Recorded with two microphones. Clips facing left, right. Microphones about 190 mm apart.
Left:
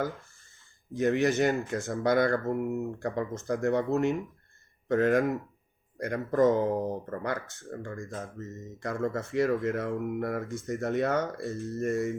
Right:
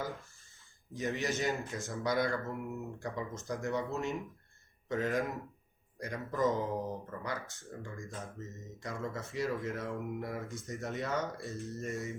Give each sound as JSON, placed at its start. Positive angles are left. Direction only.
{"t": 0.9, "sound": "speech", "side_deg": 55}